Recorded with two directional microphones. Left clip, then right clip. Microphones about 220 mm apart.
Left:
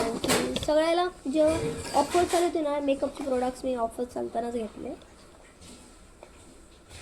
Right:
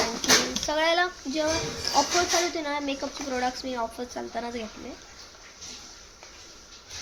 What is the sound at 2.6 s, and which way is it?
Speech, 10° right (ahead or behind).